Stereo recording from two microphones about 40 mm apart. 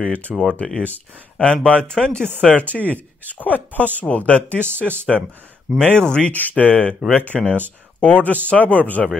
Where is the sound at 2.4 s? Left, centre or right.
Left.